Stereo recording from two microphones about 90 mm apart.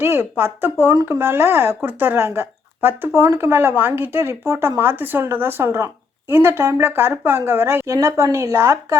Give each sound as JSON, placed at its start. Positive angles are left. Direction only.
{"t": 0.0, "sound": "speech", "side_deg": -25}